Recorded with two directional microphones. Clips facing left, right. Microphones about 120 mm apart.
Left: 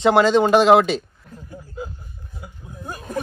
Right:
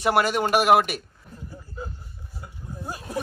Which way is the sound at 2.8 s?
5° right (ahead or behind).